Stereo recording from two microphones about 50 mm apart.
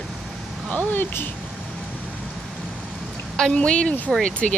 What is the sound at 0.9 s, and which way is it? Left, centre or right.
Speech, left.